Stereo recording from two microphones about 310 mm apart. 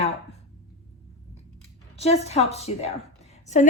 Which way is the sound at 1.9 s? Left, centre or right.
Centre.